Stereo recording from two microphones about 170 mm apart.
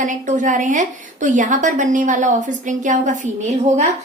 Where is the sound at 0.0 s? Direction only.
50° right (ahead or behind).